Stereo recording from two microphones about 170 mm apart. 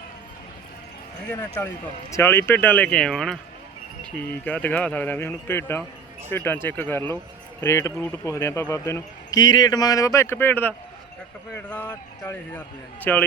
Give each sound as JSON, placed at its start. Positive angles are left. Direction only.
{"t": 1.5, "sound": "speech", "side_deg": 15}